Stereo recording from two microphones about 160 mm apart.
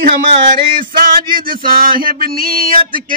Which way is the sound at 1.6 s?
65° right (ahead or behind).